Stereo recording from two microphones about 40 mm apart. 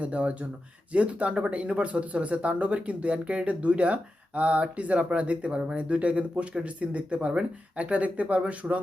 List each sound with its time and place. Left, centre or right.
0.0 s speech: right